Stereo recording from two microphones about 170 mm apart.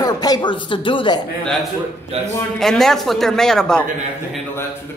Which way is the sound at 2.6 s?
Centre (ahead or behind).